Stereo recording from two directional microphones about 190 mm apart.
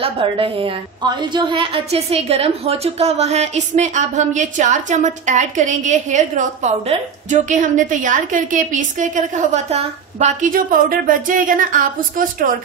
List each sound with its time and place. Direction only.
0.0 s a woman's voice: 30° right (ahead or behind); by 12.5 s 45° right (ahead or behind)